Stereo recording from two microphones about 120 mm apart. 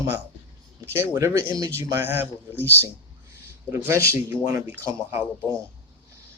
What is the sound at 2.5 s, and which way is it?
Speech, 15° left (ahead or behind).